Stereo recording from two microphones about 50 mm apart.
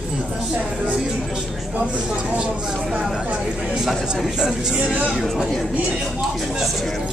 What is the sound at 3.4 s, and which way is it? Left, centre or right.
Speech, centre.